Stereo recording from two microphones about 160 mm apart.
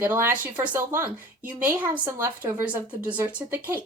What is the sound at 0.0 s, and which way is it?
A woman's voice, 15° right (ahead or behind).